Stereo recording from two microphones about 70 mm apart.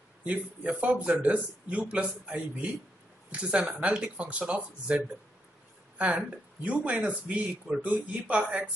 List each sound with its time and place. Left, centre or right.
0.2 s speech: right